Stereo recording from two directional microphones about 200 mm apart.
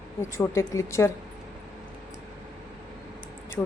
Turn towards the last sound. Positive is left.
turn(degrees=5)  # may be behind; listen again after turning